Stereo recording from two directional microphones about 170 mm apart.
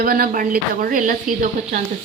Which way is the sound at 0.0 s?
60° right (ahead or behind).